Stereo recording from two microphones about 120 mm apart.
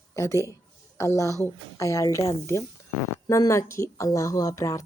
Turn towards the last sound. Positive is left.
turn(degrees=25)  # may be behind; listen again after turning